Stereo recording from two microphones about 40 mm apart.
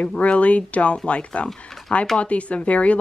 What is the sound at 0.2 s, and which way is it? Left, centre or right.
Speech, left.